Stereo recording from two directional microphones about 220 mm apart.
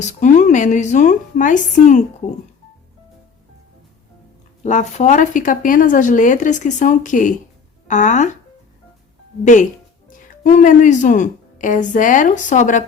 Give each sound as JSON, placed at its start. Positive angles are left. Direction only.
{"t": 0.0, "sound": "speech", "side_deg": 35}
{"t": 4.6, "sound": "speech", "side_deg": 35}
{"t": 9.4, "sound": "speech", "side_deg": 35}